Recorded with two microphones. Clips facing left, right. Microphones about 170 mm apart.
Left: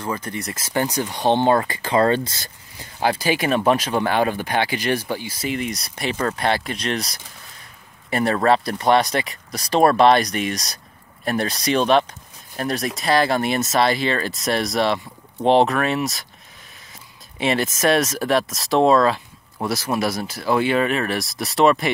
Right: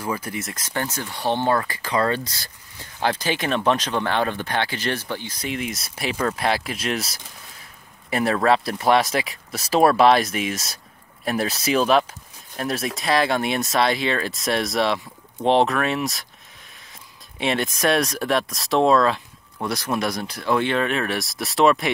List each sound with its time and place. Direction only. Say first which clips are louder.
0.0 s speech: left 1 dB; 10° right (ahead or behind); by 2.9 s 20° left (ahead or behind)
3.0 s speech: left 3 dB; 10° left (ahead or behind)
17.4 s speech: left 2 dB; centre (ahead or behind)